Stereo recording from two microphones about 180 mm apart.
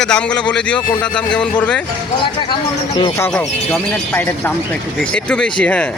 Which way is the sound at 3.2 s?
10° left (ahead or behind).